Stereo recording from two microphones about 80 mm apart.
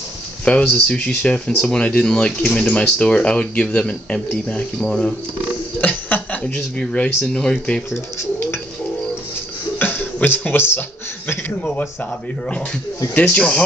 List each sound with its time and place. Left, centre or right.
0.5 s speech: centre
7.9 s pigeon: left
9.8 s speech: left
13.1 s speech: centre